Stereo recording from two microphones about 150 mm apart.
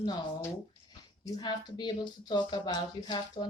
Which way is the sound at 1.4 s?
30° left (ahead or behind).